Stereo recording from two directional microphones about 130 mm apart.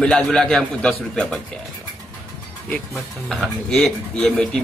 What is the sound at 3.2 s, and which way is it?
A man's voice, 5° left (ahead or behind).